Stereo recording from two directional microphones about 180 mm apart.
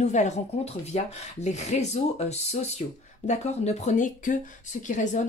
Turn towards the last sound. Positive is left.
turn(degrees=45)  # may be behind; listen again after turning